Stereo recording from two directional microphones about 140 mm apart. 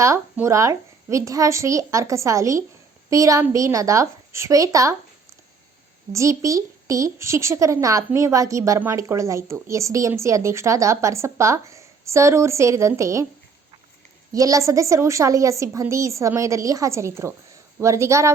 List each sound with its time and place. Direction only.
0.0 s speech: 20° right (ahead or behind)
6.1 s speech: 20° right (ahead or behind)
14.3 s speech: 25° right (ahead or behind)